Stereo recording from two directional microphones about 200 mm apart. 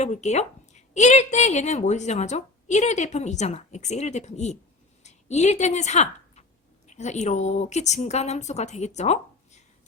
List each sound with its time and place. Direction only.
0.0 s a woman's voice: 35° left (ahead or behind)